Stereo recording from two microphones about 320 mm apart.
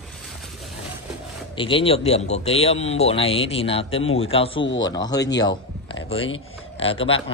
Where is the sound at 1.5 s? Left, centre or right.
Centre.